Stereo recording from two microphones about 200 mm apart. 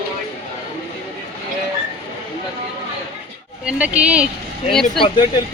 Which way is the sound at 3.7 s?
5° right (ahead or behind).